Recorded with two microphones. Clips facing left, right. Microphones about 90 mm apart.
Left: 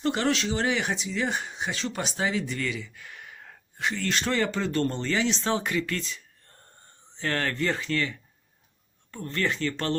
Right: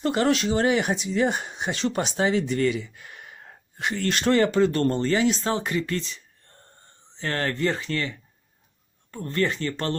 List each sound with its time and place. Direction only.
0.0 s speech: 40° right (ahead or behind)
1.6 s speech: 55° right (ahead or behind)
2.1 s speech: 40° right (ahead or behind)
2.4 s a sound: 45° right (ahead or behind)
3.9 s speech: 50° right (ahead or behind); by 8.1 s 35° right (ahead or behind)
9.1 s speech: 40° right (ahead or behind)